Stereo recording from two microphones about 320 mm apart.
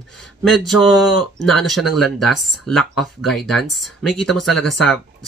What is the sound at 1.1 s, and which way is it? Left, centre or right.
Speech, left.